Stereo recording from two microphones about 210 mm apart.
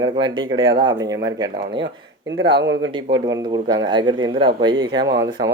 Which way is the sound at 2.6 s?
60° right (ahead or behind).